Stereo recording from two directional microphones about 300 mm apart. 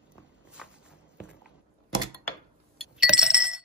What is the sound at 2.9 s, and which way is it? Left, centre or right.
Chink, centre.